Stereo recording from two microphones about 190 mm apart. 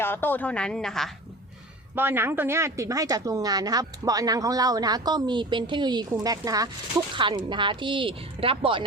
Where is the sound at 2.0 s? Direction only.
10° right (ahead or behind).